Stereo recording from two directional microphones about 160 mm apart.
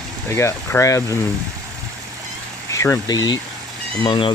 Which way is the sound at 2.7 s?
20° left (ahead or behind).